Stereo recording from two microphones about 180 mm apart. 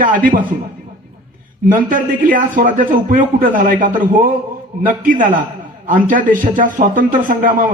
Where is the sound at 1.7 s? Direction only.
50° right (ahead or behind).